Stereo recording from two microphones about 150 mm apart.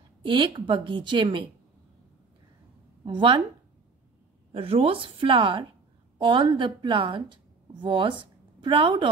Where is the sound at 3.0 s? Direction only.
35° right (ahead or behind).